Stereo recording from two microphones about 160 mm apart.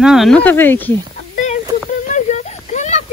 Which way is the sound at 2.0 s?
50° left (ahead or behind).